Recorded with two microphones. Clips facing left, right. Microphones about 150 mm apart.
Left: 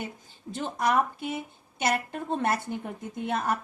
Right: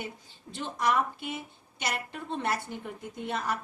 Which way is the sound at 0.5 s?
45° left (ahead or behind).